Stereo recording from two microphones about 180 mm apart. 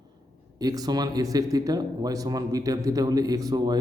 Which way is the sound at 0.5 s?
20° right (ahead or behind).